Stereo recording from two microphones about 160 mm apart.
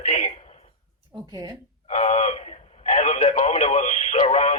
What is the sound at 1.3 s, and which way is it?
Speech, 30° right (ahead or behind).